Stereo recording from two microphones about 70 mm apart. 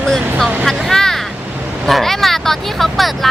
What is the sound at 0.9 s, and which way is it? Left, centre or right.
Vehicle, centre.